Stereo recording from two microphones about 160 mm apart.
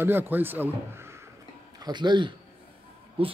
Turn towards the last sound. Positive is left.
turn(degrees=-35)  # may be behind; listen again after turning